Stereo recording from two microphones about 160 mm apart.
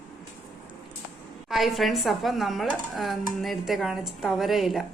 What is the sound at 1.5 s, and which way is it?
A woman's voice, centre (ahead or behind).